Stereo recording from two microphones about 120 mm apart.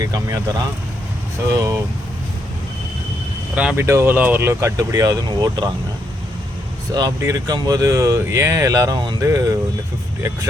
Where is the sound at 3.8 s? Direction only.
20° right (ahead or behind).